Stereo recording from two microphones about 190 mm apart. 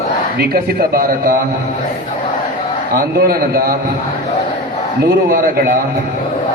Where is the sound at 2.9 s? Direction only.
50° right (ahead or behind).